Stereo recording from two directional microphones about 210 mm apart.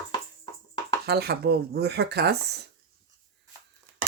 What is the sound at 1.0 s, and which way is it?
Speech, 50° right (ahead or behind).